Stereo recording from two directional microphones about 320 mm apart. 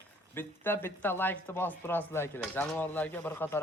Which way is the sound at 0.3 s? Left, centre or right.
Centre.